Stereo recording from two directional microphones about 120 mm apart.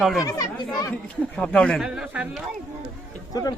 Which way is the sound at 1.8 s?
10° right (ahead or behind).